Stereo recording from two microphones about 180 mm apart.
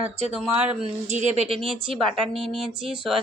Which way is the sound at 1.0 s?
40° right (ahead or behind).